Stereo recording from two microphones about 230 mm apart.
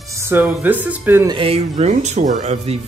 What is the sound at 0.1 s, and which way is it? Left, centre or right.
Speech, centre.